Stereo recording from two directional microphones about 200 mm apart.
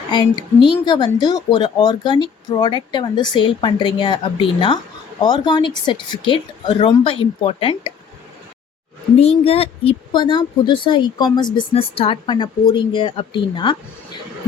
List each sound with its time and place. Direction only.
0.6 s speech: 25° left (ahead or behind)
9.1 s speech: 30° left (ahead or behind)